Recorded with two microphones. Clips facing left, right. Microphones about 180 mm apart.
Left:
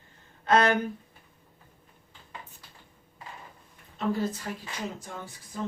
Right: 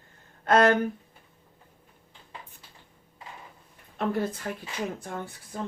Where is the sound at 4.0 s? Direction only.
60° right (ahead or behind).